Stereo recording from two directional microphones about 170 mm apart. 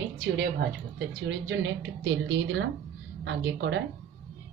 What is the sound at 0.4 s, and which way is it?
Speech, 75° right (ahead or behind).